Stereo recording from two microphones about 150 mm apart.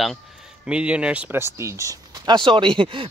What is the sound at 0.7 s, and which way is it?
Speech, 5° right (ahead or behind).